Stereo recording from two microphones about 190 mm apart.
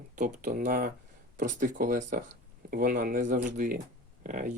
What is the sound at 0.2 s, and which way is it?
Speech, 45° right (ahead or behind).